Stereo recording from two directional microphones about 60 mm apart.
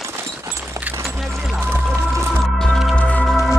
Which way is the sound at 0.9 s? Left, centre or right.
Right.